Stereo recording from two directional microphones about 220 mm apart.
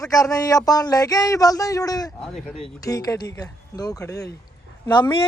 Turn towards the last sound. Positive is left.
turn(degrees=20)  # may be behind; listen again after turning